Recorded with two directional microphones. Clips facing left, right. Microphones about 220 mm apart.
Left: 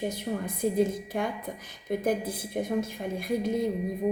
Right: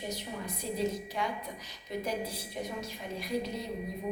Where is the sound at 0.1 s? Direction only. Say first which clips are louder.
Left 6 dB; 50° left (ahead or behind).